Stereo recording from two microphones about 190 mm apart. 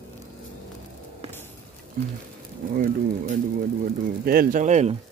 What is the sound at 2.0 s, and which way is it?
Speech, 45° right (ahead or behind).